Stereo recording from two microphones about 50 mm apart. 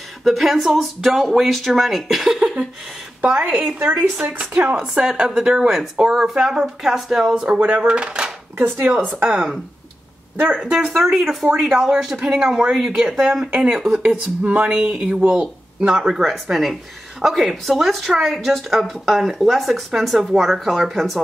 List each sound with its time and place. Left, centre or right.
0.2 s speech: centre
3.2 s speech: right; by 7.4 s centre
7.4 s speech: right
8.5 s speech: right
9.2 s speech: centre
10.3 s speech: right
10.9 s speech: centre
13.9 s speech: right; by 21.2 s centre